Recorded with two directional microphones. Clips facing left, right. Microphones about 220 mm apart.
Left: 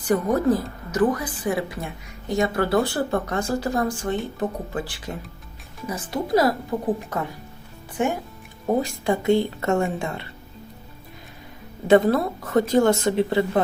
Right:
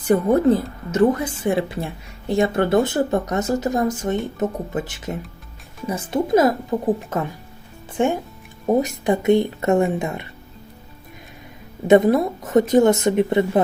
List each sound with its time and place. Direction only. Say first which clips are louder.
0.1 s speech: right 4 dB; 25° right (ahead or behind)
11.9 s speech: right 3 dB; 20° right (ahead or behind)